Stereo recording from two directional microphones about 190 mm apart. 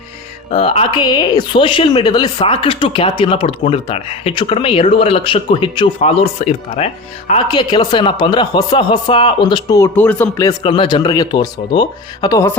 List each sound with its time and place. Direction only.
0.5 s speech: 30° left (ahead or behind); by 10.5 s 15° left (ahead or behind)
10.6 s speech: 25° left (ahead or behind)